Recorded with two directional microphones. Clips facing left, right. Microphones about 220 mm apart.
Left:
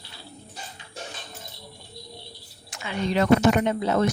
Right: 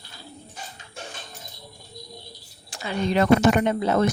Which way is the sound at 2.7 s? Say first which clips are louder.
Right 3 dB; 35° right (ahead or behind).